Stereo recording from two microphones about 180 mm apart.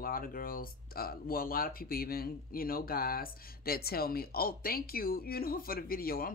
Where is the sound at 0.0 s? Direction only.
55° left (ahead or behind).